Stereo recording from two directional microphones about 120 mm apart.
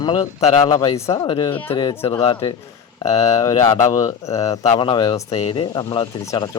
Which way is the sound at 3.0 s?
65° left (ahead or behind).